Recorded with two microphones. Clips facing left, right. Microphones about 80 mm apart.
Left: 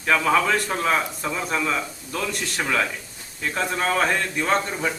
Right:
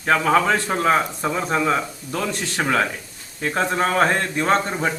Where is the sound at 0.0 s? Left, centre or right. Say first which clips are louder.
Right 2 dB; right.